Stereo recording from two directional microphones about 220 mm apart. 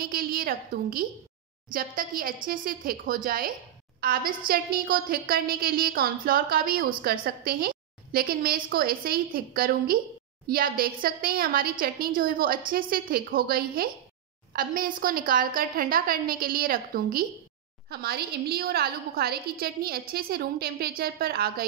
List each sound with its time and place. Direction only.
0.0 s a woman's voice: 40° right (ahead or behind)